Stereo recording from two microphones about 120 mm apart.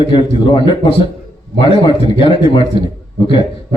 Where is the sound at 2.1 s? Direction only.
45° left (ahead or behind).